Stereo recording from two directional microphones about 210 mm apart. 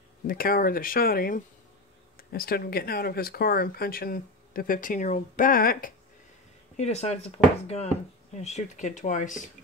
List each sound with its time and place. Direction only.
0.3 s speech: 45° left (ahead or behind)
6.8 s speech: 30° left (ahead or behind)